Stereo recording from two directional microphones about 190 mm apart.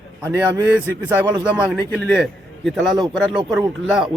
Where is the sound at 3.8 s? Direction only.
Centre (ahead or behind).